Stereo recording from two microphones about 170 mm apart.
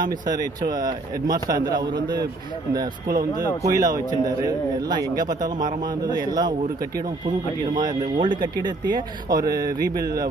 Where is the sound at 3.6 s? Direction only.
20° right (ahead or behind).